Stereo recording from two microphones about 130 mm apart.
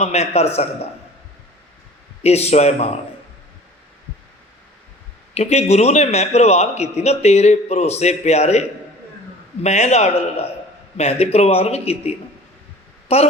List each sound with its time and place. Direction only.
0.0 s speech: 55° left (ahead or behind)
2.2 s a man's voice: 55° left (ahead or behind)
5.3 s a man's voice: 55° left (ahead or behind)
9.6 s a man's voice: 55° left (ahead or behind)